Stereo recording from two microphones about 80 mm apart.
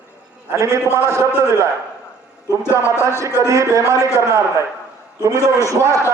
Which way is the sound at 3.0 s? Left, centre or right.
Right.